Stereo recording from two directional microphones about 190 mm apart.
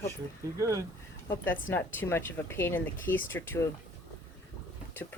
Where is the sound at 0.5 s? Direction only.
15° right (ahead or behind).